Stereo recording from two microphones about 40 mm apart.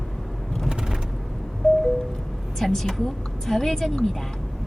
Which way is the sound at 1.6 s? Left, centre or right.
Centre.